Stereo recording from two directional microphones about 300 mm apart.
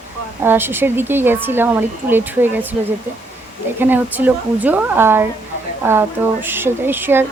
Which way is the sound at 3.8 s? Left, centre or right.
Centre.